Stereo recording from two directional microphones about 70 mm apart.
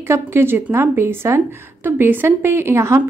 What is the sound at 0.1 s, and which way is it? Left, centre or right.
A woman's voice, right.